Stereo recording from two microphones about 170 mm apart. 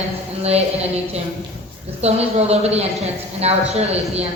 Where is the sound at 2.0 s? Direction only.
40° right (ahead or behind).